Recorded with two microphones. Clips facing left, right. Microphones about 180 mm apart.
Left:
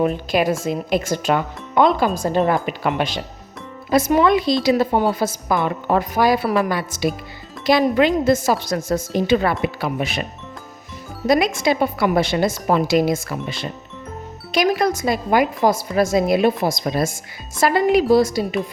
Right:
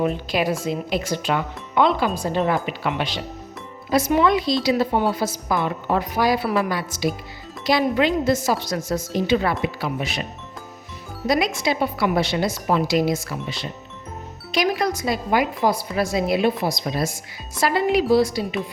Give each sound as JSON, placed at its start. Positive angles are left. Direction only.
{"t": 0.0, "sound": "speech", "side_deg": 50}
{"t": 11.3, "sound": "speech", "side_deg": 50}